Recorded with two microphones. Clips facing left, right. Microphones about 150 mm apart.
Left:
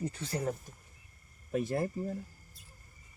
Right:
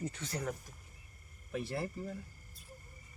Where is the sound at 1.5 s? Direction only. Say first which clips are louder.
Left 6 dB; 45° left (ahead or behind).